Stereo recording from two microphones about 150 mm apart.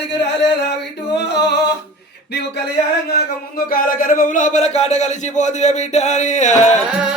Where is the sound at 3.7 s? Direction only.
65° left (ahead or behind).